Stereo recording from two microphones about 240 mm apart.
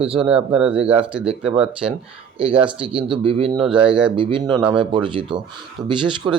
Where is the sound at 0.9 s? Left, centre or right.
Right.